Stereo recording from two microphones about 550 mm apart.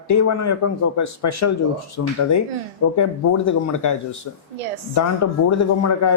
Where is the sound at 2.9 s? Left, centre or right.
Left.